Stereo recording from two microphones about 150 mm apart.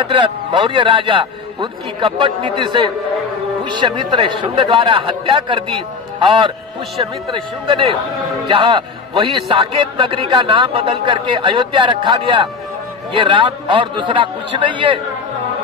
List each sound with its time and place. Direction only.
0.0 s a man's voice: 35° right (ahead or behind)